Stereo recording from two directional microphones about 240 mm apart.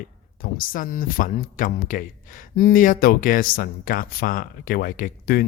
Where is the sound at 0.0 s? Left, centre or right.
Left.